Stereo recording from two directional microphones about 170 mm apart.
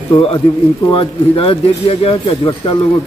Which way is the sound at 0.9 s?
30° left (ahead or behind).